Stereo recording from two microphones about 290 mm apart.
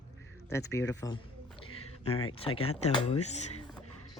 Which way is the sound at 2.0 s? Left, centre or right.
Left.